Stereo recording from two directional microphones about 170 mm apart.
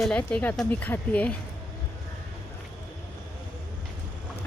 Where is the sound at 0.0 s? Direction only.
10° left (ahead or behind).